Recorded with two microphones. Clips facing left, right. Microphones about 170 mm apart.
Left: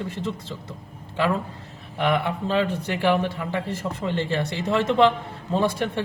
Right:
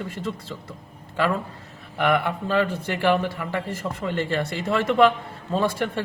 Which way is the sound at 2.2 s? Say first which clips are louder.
Even; 20° left (ahead or behind).